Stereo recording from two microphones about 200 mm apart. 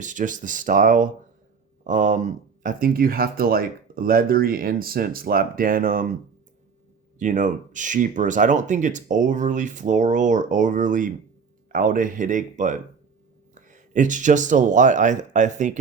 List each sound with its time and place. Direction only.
0.0 s speech: 40° right (ahead or behind)
7.2 s speech: 40° right (ahead or behind)